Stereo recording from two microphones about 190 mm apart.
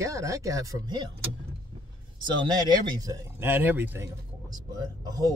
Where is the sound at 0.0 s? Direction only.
15° right (ahead or behind).